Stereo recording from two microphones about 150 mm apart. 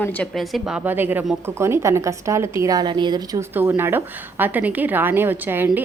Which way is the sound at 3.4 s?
15° right (ahead or behind).